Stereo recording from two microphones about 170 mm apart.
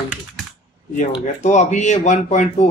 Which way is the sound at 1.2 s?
45° left (ahead or behind).